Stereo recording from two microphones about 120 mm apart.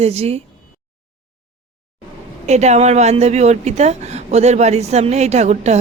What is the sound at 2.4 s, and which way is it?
A woman's voice, 70° right (ahead or behind).